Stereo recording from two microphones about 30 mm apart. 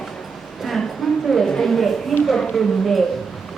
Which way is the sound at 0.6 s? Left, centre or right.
Centre.